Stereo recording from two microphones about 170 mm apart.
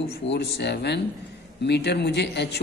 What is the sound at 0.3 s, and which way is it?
A man's voice, 75° left (ahead or behind).